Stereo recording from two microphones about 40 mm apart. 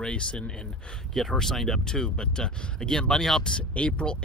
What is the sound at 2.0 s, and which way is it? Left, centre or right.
Speech, centre.